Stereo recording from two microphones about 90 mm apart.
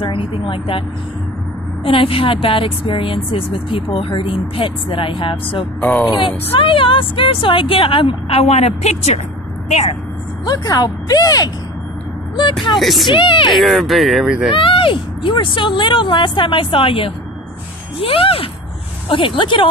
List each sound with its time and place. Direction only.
0.0 s speech: 80° left
1.9 s speech: 85° left
5.8 s speech: 20° left (ahead or behind)
6.0 s speech: 75° left (ahead or behind)
10.4 s speech: 45° left (ahead or behind)
12.7 s speech: centre (ahead or behind)
13.0 s speech: 65° left (ahead or behind)
13.6 s speech: centre (ahead or behind)
14.5 s speech: 75° left (ahead or behind)
17.9 s speech: 90° left
19.0 s speech: 70° left (ahead or behind)